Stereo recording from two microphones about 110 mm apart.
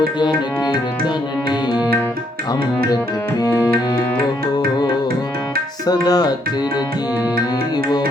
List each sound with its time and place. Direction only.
0.2 s music: 45° left (ahead or behind)
5.8 s tabla: 35° left (ahead or behind)